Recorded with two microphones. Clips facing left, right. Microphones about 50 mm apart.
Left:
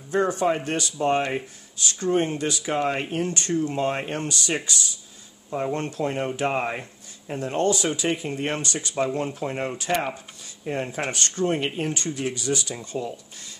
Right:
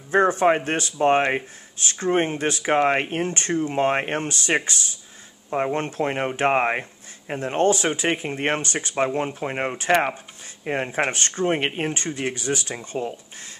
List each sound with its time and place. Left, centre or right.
0.1 s speech: right